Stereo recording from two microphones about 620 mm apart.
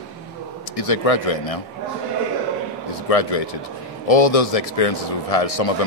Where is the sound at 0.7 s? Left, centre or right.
Left.